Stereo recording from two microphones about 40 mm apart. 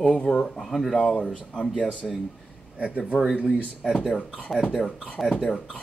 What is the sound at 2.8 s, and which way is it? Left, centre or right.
Speech, right.